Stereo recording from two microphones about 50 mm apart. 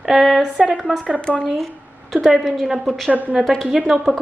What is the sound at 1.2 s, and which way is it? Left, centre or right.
Speech, left.